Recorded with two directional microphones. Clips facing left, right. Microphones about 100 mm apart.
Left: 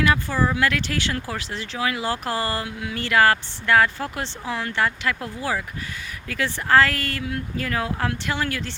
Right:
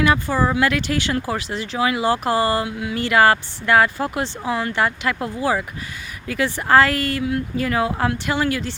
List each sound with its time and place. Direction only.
0.5 s speech: 15° right (ahead or behind)